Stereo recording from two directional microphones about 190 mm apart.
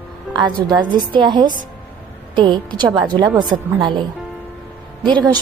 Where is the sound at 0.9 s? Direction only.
25° right (ahead or behind).